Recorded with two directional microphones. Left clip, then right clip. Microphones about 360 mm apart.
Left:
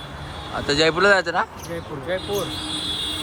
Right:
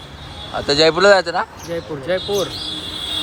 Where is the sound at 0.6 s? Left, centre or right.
Centre.